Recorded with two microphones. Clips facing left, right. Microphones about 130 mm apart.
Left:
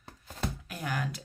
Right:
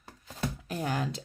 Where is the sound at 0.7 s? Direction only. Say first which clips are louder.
Right 6 dB; 30° right (ahead or behind).